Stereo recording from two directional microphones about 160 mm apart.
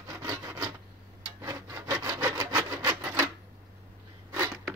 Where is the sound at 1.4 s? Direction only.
20° right (ahead or behind).